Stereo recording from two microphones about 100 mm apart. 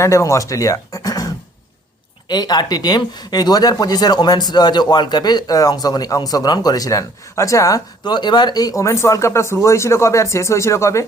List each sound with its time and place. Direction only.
0.0 s speech: 30° left (ahead or behind)
8.0 s speech: 45° left (ahead or behind); by 11.0 s 30° left (ahead or behind)